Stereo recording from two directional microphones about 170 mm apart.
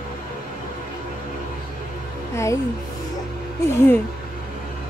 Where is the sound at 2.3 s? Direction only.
15° left (ahead or behind).